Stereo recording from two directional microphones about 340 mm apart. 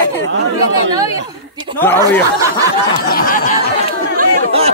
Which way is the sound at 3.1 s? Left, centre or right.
Left.